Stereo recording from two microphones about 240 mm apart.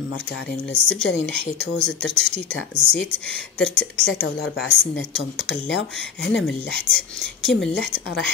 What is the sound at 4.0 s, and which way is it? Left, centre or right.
Speech, left.